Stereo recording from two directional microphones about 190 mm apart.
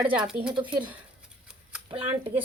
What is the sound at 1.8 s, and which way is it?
Speech, 30° right (ahead or behind).